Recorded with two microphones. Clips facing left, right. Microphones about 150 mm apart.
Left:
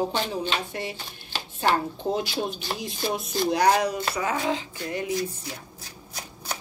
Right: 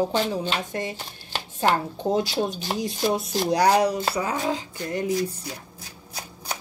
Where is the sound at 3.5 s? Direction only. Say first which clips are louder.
Right 2 dB; 35° right (ahead or behind).